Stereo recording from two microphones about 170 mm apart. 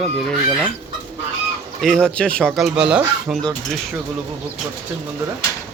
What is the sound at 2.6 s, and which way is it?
Speech, 5° right (ahead or behind).